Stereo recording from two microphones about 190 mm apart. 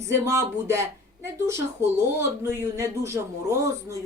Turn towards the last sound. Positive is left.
turn(degrees=-15)  # may be behind; listen again after turning